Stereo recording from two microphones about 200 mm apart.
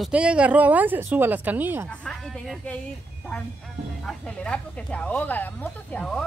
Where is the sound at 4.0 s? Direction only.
5° left (ahead or behind).